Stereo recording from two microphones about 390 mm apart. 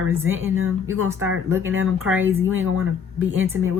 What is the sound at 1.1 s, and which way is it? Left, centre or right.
Speech, centre.